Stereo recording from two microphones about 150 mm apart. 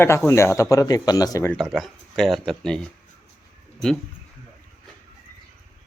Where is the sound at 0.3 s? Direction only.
20° left (ahead or behind).